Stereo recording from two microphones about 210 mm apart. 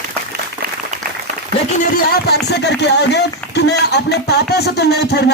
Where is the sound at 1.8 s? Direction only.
50° left (ahead or behind).